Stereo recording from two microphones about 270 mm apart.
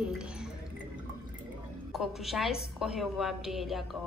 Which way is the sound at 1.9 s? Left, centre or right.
Centre.